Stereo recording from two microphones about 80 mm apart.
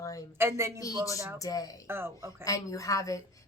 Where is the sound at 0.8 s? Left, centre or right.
Left.